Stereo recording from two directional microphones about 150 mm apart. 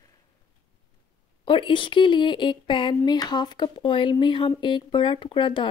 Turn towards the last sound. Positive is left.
turn(degrees=30)  # may be behind; listen again after turning